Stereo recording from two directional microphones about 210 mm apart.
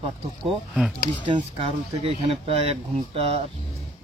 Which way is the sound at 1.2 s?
25° right (ahead or behind).